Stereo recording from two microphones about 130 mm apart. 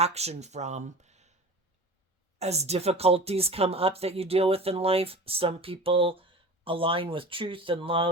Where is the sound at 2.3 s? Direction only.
55° right (ahead or behind).